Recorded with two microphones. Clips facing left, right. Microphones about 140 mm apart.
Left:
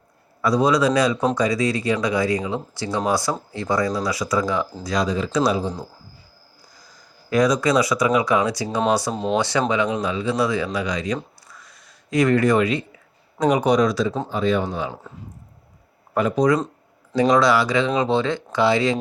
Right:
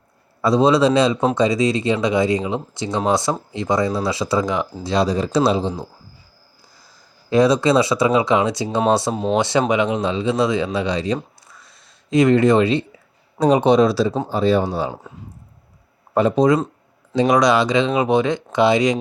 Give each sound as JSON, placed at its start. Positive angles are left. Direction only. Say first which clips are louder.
{"t": 0.4, "sound": "speech", "louder": "right 3 dB", "side_deg": -25}
{"t": 5.4, "sound": "speech", "louder": "right 3 dB", "side_deg": -25}
{"t": 7.3, "sound": "speech", "louder": "right 3 dB", "side_deg": -25}
{"t": 9.1, "sound": "speech", "louder": "right 2 dB", "side_deg": 0}
{"t": 9.4, "sound": "speech", "louder": "right 5 dB", "side_deg": -20}
{"t": 11.6, "sound": "a sound", "louder": "left 1 dB", "side_deg": -25}
{"t": 13.4, "sound": "speech", "louder": "right 4 dB", "side_deg": -30}
{"t": 16.1, "sound": "speech", "louder": "right 3 dB", "side_deg": -25}